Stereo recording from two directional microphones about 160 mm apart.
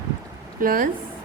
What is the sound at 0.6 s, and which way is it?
Speech, 60° right (ahead or behind).